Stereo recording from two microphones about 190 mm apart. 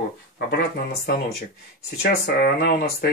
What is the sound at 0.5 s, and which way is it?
Speech, 60° left (ahead or behind).